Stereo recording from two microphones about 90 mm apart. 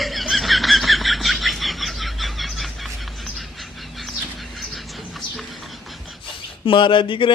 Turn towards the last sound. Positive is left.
turn(degrees=70)  # may be behind; listen again after turning